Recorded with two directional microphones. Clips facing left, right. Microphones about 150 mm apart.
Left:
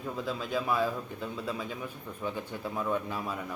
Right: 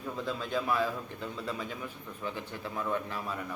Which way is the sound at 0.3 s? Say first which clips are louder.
Even; 5° left (ahead or behind).